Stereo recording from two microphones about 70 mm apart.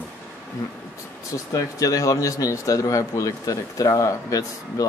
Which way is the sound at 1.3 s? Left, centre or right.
Left.